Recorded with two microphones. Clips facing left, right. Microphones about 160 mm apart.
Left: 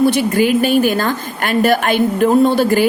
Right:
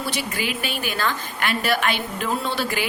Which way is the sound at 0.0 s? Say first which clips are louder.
Left 14 dB; 50° left (ahead or behind).